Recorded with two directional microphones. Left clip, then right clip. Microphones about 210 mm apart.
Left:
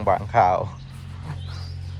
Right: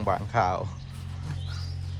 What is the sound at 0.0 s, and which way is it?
Speech, 20° right (ahead or behind).